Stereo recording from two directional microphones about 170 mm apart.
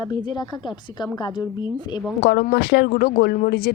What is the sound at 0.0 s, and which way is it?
A woman's voice, 25° left (ahead or behind).